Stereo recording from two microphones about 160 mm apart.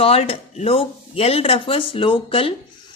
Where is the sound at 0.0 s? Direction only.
35° left (ahead or behind).